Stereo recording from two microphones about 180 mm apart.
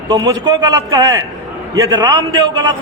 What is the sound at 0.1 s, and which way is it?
A man's voice, 20° right (ahead or behind).